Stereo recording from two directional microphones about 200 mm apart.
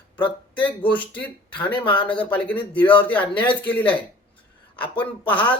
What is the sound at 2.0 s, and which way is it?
Speech, 5° left (ahead or behind).